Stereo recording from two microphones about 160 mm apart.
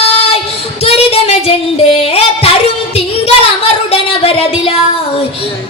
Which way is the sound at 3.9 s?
35° left (ahead or behind).